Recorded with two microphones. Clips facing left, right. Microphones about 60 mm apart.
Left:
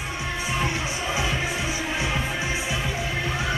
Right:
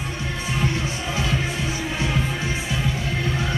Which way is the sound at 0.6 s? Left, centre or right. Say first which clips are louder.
Right 1 dB; centre.